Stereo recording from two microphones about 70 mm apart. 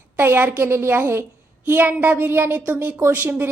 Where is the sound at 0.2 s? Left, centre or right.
Right.